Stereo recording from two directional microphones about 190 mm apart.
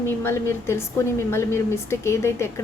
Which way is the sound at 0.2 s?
10° left (ahead or behind).